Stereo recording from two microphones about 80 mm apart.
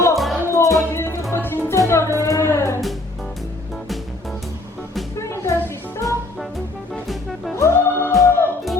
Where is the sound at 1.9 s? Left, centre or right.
Left.